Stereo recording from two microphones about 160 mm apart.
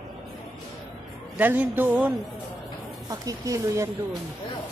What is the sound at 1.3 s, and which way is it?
Speech, 10° right (ahead or behind).